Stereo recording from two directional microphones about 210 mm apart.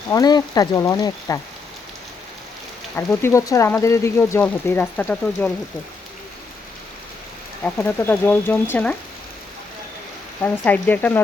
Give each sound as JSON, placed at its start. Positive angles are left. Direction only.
{"t": 0.1, "sound": "speech", "side_deg": 20}
{"t": 2.9, "sound": "speech", "side_deg": 10}
{"t": 7.6, "sound": "speech", "side_deg": 10}
{"t": 10.4, "sound": "speech", "side_deg": 10}